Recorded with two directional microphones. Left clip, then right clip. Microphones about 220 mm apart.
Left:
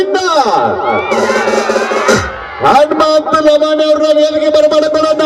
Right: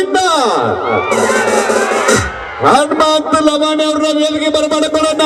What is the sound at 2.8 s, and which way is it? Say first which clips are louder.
A man's voice: left 3 dB; 15° left (ahead or behind).